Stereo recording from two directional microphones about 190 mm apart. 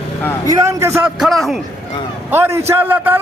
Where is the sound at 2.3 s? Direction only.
10° right (ahead or behind).